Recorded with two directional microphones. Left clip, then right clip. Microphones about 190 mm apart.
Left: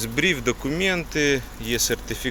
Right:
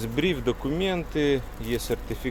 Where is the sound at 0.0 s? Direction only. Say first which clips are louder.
Left 4 dB; 5° right (ahead or behind).